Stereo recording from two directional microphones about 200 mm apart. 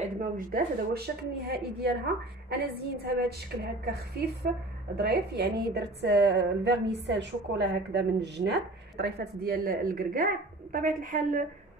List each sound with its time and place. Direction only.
0.2 s a woman's voice: 45° right (ahead or behind)